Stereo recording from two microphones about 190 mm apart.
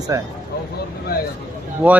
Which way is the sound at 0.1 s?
15° right (ahead or behind).